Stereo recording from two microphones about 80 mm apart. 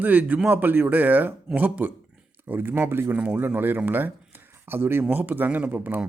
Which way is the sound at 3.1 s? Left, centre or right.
Centre.